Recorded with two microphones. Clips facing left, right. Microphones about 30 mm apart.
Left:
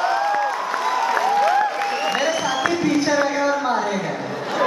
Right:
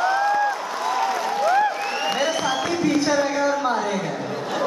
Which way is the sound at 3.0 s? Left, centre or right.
Centre.